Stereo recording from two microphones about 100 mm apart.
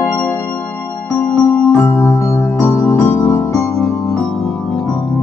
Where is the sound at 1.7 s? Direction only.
25° left (ahead or behind).